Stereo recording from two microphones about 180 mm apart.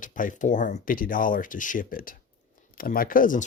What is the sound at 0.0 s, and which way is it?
Speech, 45° left (ahead or behind).